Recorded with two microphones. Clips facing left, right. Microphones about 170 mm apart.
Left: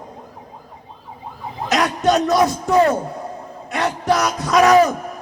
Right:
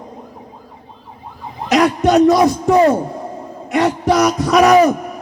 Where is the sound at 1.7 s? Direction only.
5° right (ahead or behind).